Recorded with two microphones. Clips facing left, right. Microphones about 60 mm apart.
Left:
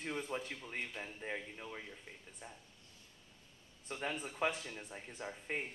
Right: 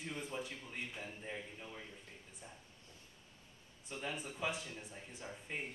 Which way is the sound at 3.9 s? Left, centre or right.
Left.